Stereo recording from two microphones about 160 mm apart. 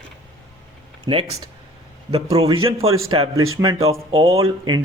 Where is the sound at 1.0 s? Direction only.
30° right (ahead or behind).